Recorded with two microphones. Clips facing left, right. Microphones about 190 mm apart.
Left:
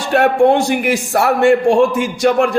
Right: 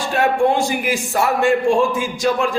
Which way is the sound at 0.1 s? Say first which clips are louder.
Left 6 dB; 65° left (ahead or behind).